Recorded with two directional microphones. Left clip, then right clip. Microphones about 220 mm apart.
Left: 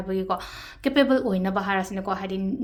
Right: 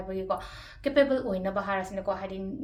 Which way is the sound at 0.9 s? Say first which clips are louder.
Left 3 dB; 40° left (ahead or behind).